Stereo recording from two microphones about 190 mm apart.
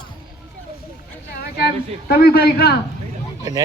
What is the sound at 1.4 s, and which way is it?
A man's voice, 55° left (ahead or behind).